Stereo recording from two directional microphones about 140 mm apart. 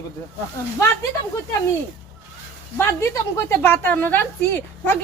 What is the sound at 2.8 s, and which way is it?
Speech, 20° left (ahead or behind).